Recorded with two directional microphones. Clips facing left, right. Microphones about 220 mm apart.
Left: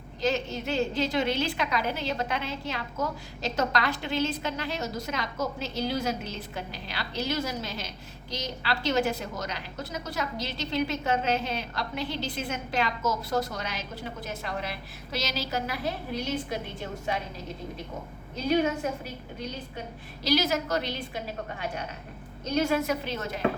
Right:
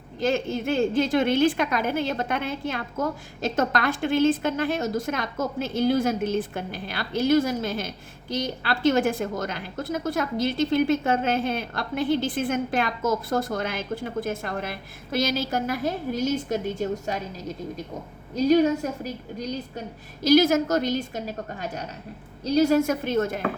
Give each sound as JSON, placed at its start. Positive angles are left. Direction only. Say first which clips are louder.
{"t": 0.2, "sound": "a woman's voice", "louder": "right 4 dB", "side_deg": -50}
{"t": 18.3, "sound": "a woman's voice", "louder": "right 7 dB", "side_deg": -40}